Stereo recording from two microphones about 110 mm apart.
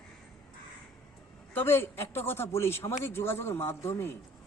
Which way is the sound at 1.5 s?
20° left (ahead or behind).